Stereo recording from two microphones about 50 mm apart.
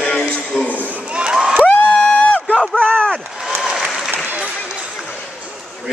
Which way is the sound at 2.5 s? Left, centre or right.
Centre.